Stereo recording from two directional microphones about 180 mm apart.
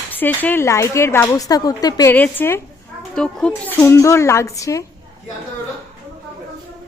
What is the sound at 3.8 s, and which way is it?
Speech, 15° left (ahead or behind).